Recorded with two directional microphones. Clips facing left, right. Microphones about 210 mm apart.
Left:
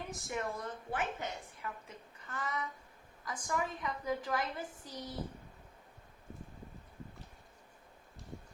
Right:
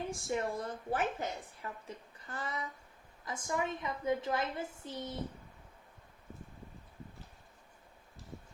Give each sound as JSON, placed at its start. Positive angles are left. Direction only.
{"t": 0.1, "sound": "a woman's voice", "side_deg": -30}